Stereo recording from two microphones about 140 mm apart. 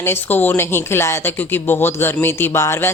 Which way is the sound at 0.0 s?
15° left (ahead or behind).